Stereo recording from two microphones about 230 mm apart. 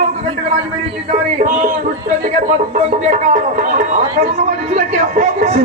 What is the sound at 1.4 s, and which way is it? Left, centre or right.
Speech, right.